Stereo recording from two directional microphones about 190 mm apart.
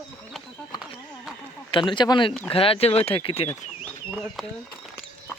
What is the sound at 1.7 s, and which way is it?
Speech, 25° left (ahead or behind).